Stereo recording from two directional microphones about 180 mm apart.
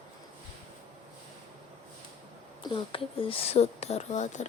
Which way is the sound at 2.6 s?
30° left (ahead or behind).